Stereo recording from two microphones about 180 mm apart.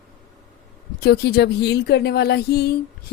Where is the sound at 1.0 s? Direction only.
65° left (ahead or behind).